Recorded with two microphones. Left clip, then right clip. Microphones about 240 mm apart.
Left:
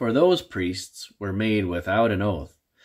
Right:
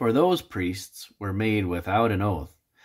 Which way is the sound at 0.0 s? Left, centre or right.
Centre.